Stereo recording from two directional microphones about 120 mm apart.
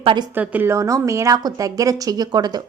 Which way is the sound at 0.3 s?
15° right (ahead or behind).